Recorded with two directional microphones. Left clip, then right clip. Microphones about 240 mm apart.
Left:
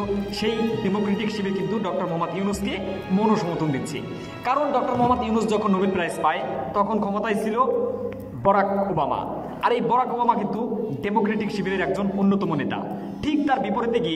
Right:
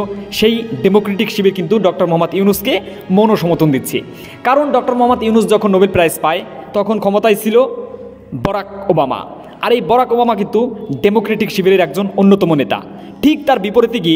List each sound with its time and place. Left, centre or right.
0.8 s a man's voice: right